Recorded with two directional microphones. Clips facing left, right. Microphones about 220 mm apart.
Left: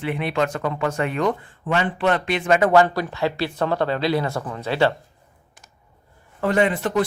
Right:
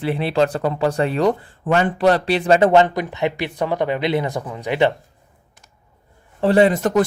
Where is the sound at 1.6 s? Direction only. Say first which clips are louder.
Right 5 dB; 45° right (ahead or behind); by 4.9 s 15° right (ahead or behind).